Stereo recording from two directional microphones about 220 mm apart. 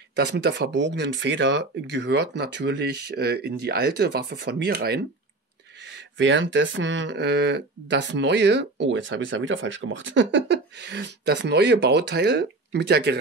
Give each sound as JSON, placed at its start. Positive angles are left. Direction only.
{"t": 0.1, "sound": "speech", "side_deg": -50}
{"t": 6.1, "sound": "speech", "side_deg": -55}